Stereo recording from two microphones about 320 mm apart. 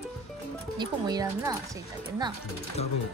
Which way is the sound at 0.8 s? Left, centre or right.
Centre.